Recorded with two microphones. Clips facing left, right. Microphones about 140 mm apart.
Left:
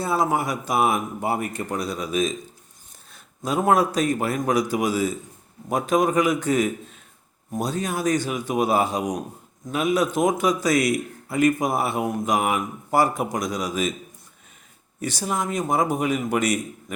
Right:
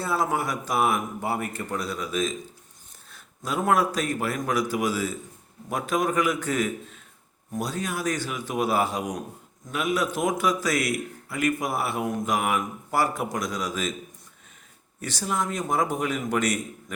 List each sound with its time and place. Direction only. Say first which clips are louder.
0.0 s a man's voice: left 3 dB; 15° left (ahead or behind)
3.4 s a man's voice: left 3 dB; 20° left (ahead or behind)
15.0 s a man's voice: left 2 dB; 15° left (ahead or behind)